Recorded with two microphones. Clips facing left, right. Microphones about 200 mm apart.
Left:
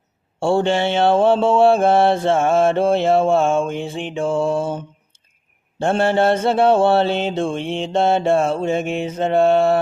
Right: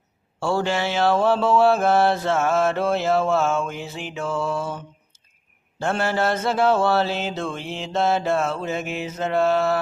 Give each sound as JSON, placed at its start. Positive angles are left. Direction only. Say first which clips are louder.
{"t": 0.3, "sound": "mantra", "louder": "left 5 dB", "side_deg": 30}
{"t": 5.8, "sound": "mantra", "louder": "left 6 dB", "side_deg": 30}